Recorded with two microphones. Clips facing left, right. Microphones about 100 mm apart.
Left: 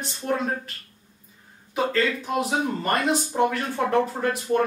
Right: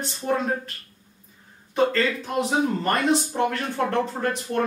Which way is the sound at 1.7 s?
5° left (ahead or behind).